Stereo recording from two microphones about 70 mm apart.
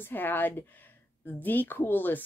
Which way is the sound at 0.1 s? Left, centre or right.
Left.